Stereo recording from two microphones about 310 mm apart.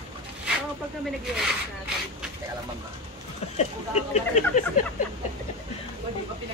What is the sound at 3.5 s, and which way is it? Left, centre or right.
Speech, left.